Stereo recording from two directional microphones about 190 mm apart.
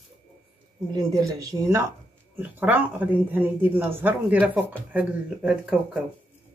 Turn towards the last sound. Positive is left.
turn(degrees=-5)  # may be behind; listen again after turning